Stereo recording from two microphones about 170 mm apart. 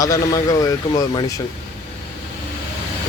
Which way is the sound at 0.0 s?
20° left (ahead or behind).